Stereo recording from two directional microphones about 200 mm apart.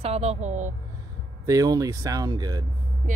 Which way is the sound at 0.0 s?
30° right (ahead or behind).